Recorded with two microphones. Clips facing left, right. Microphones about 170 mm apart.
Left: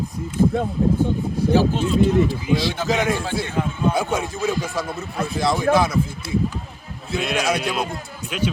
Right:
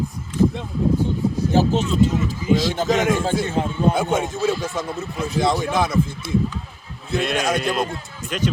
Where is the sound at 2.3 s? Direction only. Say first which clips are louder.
Right 2 dB; 45° right (ahead or behind).